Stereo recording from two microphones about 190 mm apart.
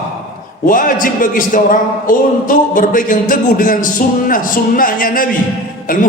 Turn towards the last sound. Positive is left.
turn(degrees=45)  # may be behind; listen again after turning